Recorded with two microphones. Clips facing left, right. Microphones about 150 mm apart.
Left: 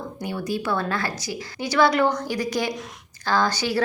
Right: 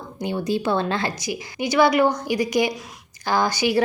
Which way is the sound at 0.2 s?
25° right (ahead or behind).